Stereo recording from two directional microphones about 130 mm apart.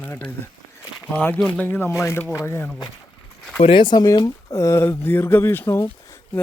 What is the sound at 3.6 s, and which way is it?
Speech, 40° left (ahead or behind).